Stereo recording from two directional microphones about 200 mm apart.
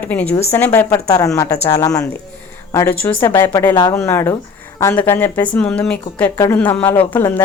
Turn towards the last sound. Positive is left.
turn(degrees=10)  # may be behind; listen again after turning